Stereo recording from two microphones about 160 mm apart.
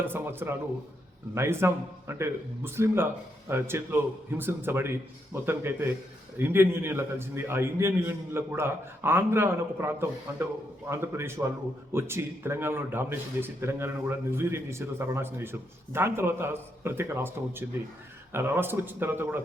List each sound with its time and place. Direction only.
0.0 s a man's voice: 15° right (ahead or behind)